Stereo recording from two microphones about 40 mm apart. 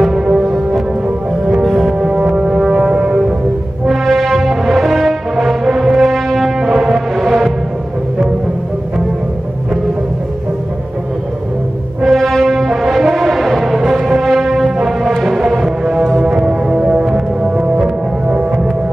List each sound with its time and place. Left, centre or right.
0.0 s music: centre
1.6 s music: centre
2.0 s music: right
2.4 s foghorn: centre
3.8 s music: centre
6.1 s french horn: centre
6.7 s music: centre
12.0 s brass instrument: centre
14.9 s music: centre; by 18.4 s right